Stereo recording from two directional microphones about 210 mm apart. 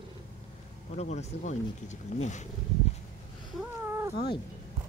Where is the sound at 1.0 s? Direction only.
30° left (ahead or behind).